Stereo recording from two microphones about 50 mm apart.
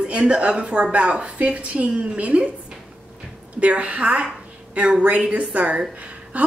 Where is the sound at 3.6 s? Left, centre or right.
Right.